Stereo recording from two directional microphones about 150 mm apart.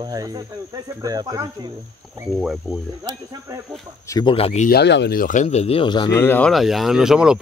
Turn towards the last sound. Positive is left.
turn(degrees=-5)  # may be behind; listen again after turning